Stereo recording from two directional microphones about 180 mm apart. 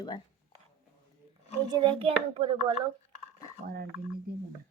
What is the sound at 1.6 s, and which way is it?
A woman's voice, 25° right (ahead or behind).